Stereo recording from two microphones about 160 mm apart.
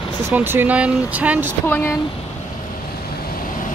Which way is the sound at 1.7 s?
15° left (ahead or behind).